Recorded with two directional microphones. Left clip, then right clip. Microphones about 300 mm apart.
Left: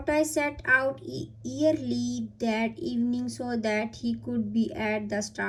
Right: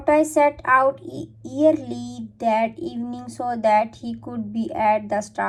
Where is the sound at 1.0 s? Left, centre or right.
Centre.